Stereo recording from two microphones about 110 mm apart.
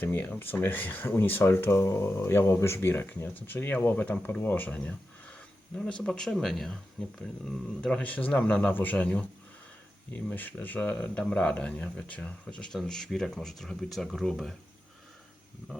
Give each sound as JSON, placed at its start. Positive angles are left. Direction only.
{"t": 0.0, "sound": "speech", "side_deg": 15}